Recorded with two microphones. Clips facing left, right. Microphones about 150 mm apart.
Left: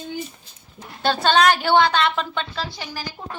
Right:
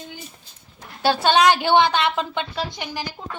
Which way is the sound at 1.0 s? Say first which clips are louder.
Right 1 dB; 10° right (ahead or behind).